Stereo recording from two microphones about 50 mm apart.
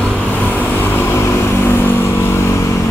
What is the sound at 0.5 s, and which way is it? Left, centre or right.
Vehicle, left.